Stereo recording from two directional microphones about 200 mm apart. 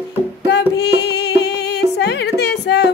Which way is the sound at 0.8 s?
55° left (ahead or behind).